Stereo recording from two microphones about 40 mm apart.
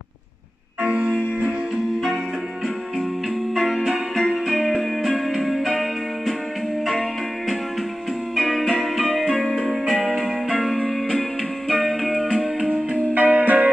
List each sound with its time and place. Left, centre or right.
3.5 s music: centre
9.3 s music: centre
9.6 s music: right
9.9 s music: centre
13.1 s music: right